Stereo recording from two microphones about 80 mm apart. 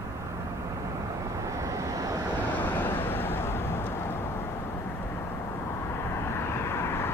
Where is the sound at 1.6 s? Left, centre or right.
Right.